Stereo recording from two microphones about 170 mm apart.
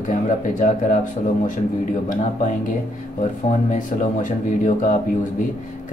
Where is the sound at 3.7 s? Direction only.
50° left (ahead or behind).